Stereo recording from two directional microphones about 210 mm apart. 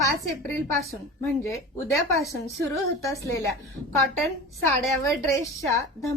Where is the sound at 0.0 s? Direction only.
15° left (ahead or behind).